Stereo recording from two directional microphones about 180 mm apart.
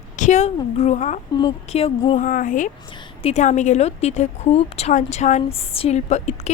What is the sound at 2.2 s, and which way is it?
A woman's voice, 45° left (ahead or behind).